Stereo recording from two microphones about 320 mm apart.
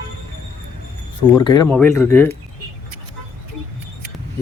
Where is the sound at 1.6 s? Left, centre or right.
Centre.